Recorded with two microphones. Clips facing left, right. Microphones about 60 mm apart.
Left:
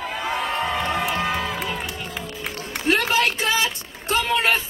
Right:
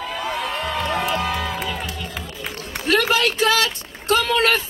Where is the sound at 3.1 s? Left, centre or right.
Left.